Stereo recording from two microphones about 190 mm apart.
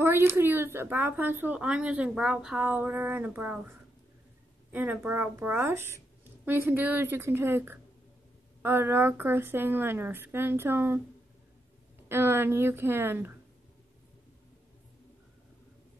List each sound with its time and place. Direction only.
0.0 s speech: 15° right (ahead or behind)
4.7 s speech: 10° right (ahead or behind)
12.1 s speech: 10° right (ahead or behind)